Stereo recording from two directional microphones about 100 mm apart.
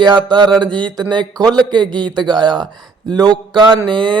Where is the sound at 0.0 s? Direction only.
50° right (ahead or behind).